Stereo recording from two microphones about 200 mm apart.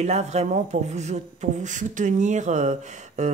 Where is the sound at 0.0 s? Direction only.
35° right (ahead or behind).